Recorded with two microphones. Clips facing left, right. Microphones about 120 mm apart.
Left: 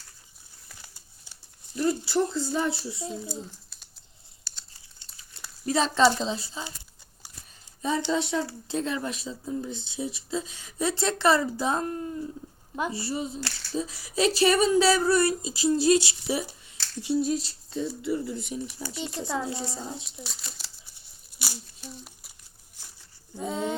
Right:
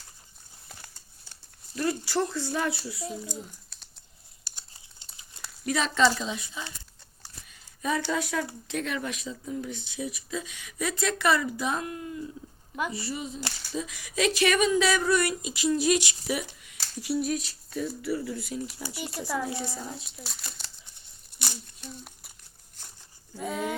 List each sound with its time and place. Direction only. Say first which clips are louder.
1.9 s speech: left 3 dB; 15° left (ahead or behind)
4.4 s crumpling: right 1 dB; 15° right (ahead or behind)
5.6 s speech: left 2 dB; 30° left (ahead or behind)
7.8 s speech: left 2 dB; 25° left (ahead or behind)
13.4 s a sound: even; 15° right (ahead or behind)
13.7 s speech: left 3 dB; 35° left (ahead or behind)
16.7 s a sound: left 1 dB; 10° right (ahead or behind)
17.0 s speech: left 3 dB; 25° left (ahead or behind)
20.2 s crumpling: even; centre (ahead or behind)
23.3 s speech: left 1 dB; 25° left (ahead or behind)